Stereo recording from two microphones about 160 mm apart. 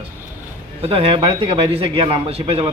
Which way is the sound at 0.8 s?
35° right (ahead or behind).